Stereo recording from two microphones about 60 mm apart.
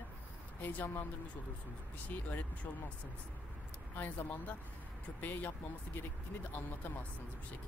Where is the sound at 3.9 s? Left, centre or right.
Left.